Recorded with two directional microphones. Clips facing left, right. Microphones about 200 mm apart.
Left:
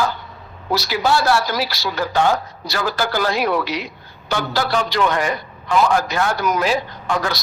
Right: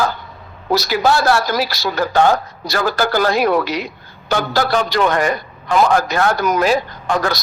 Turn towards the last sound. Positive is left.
turn(degrees=-45)  # may be behind; listen again after turning